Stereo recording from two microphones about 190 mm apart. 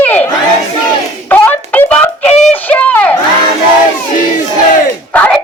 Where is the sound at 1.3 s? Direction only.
10° left (ahead or behind).